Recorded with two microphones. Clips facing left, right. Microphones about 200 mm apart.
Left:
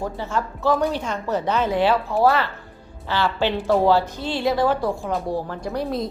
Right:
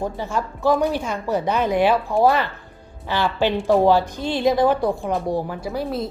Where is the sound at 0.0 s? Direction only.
15° right (ahead or behind).